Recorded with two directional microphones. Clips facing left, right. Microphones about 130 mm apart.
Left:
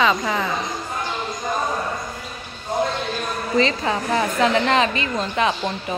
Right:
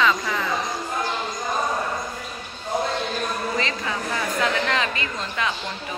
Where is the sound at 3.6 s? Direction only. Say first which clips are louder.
Left 7 dB; 25° left (ahead or behind).